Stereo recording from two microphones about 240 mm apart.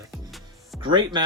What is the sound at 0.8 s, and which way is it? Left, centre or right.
Speech, centre.